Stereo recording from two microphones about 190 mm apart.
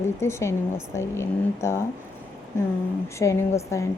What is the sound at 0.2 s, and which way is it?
Speech, 15° left (ahead or behind).